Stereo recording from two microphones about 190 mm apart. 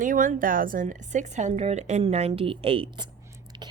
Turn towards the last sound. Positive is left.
turn(degrees=-25)  # may be behind; listen again after turning